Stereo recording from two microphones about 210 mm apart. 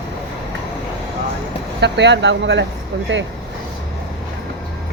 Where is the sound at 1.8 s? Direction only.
55° right (ahead or behind).